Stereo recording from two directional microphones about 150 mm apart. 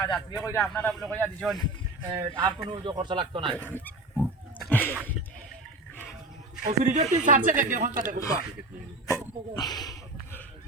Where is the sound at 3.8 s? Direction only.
10° left (ahead or behind).